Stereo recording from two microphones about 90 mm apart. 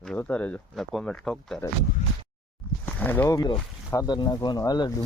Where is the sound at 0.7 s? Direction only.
Centre (ahead or behind).